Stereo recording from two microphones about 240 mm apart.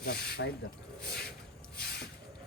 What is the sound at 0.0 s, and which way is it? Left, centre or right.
Speech, left.